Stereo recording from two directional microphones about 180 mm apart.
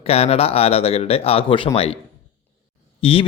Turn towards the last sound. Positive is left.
turn(degrees=30)  # may be behind; listen again after turning